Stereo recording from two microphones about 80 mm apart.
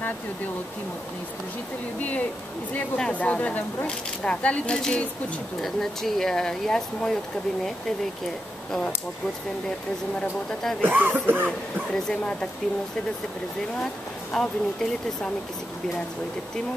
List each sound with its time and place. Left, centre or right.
3.0 s speech: centre
10.8 s speech: right
11.9 s speech: centre
14.3 s speech: centre